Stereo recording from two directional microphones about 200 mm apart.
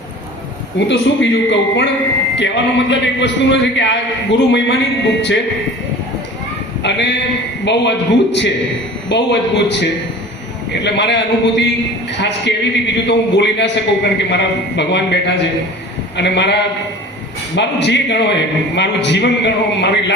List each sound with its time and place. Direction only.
0.9 s a man's voice: 65° left (ahead or behind)
6.8 s a man's voice: 60° left (ahead or behind)